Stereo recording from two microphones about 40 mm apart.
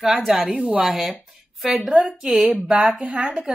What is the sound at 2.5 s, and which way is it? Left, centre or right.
Speech, right.